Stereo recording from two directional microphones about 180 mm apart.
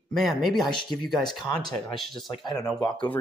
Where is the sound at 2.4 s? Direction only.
20° left (ahead or behind).